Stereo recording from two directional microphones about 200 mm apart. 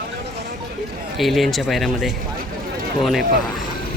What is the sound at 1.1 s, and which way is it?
Speech, centre (ahead or behind).